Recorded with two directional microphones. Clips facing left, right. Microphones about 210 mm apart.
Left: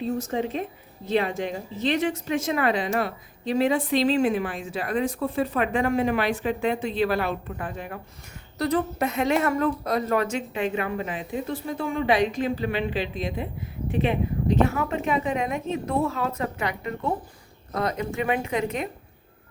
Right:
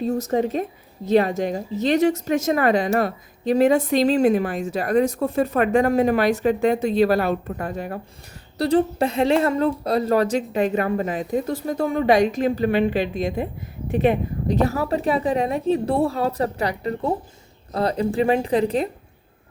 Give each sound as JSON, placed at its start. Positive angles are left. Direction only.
{"t": 0.0, "sound": "a woman's voice", "side_deg": -45}
{"t": 8.5, "sound": "speech", "side_deg": -30}